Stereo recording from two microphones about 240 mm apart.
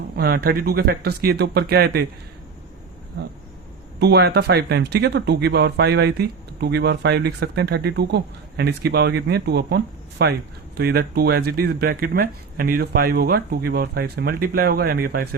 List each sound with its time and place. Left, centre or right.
0.2 s speech: right
4.0 s speech: right